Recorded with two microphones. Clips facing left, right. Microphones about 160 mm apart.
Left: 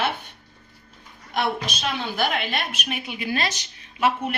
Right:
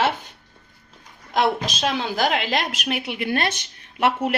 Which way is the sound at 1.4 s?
90° right.